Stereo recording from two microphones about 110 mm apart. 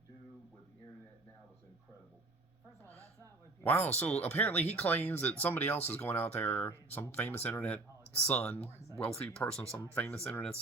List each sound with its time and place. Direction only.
2.9 s a sound: 25° right (ahead or behind)
3.6 s speech: 15° left (ahead or behind)
9.0 s speech: 65° left (ahead or behind)
9.2 s speech: 10° left (ahead or behind)